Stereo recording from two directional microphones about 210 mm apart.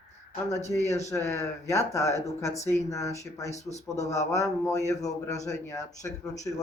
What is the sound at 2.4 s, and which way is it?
Speech, 30° left (ahead or behind).